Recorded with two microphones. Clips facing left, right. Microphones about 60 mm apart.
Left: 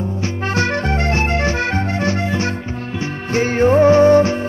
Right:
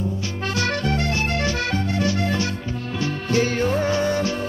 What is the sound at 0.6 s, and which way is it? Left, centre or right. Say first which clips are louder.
Accordion: left 4 dB; left.